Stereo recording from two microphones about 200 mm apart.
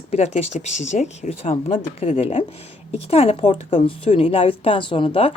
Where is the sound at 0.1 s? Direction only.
35° left (ahead or behind).